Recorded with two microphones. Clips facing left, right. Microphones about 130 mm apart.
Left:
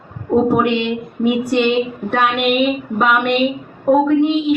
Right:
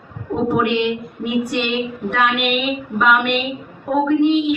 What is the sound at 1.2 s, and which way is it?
A woman's voice, 40° left (ahead or behind).